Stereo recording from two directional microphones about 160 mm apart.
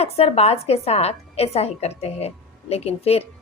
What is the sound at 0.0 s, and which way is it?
A woman's voice, 40° left (ahead or behind).